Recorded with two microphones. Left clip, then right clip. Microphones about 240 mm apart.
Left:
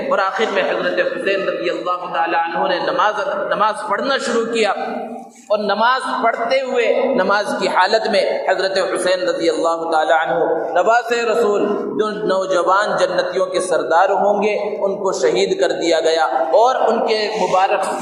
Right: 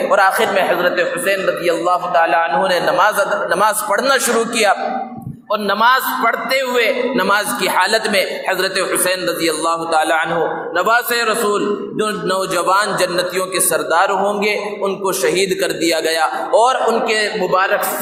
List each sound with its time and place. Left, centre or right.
0.1 s a man's voice: right